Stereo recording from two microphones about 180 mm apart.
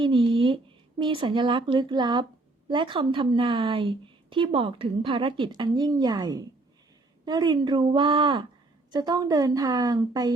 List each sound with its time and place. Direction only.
0.0 s a woman's voice: 30° right (ahead or behind)